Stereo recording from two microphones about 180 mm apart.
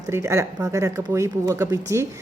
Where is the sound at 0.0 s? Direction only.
15° right (ahead or behind).